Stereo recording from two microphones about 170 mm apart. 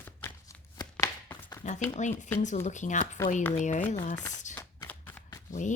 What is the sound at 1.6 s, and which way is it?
Speech, 45° left (ahead or behind).